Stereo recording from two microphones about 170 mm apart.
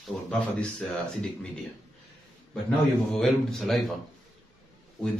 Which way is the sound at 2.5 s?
5° left (ahead or behind).